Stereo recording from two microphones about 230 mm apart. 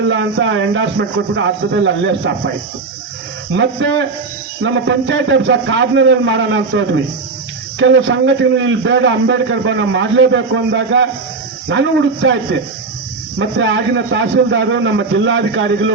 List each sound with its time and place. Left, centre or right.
0.0 s a man's voice: right
3.5 s a man's voice: right
13.4 s a man's voice: right